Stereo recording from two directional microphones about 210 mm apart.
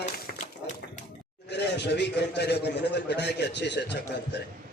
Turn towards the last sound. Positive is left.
turn(degrees=55)  # may be behind; listen again after turning